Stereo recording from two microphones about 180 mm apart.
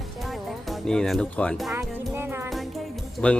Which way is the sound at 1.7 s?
15° right (ahead or behind).